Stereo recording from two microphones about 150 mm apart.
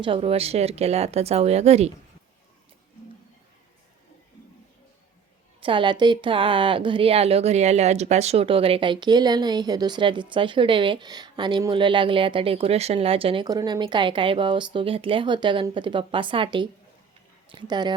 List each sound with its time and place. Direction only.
0.0 s speech: 40° right (ahead or behind)
5.5 s a woman's voice: 35° right (ahead or behind)